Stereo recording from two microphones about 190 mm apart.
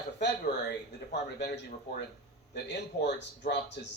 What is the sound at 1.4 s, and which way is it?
Speech, 60° left (ahead or behind).